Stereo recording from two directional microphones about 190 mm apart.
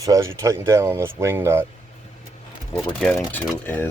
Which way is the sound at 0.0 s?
15° right (ahead or behind).